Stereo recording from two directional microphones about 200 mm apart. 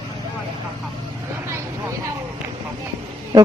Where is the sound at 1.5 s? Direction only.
15° right (ahead or behind).